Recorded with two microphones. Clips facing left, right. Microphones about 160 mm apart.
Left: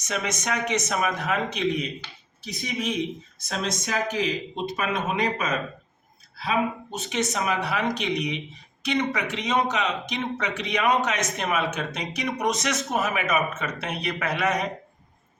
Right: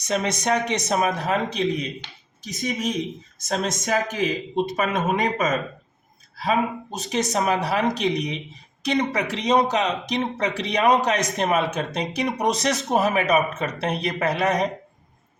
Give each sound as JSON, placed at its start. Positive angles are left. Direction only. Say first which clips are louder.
{"t": 0.0, "sound": "speech", "louder": "right 5 dB", "side_deg": -35}